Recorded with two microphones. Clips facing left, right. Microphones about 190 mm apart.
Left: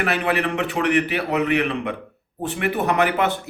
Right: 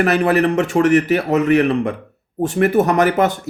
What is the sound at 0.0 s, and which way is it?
A man's voice, 45° right (ahead or behind).